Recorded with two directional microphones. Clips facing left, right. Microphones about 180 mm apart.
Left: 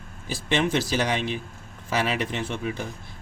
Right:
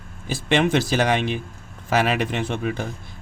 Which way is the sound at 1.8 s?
55° right (ahead or behind).